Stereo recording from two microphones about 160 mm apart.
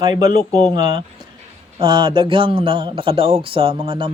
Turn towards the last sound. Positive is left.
turn(degrees=-30)  # may be behind; listen again after turning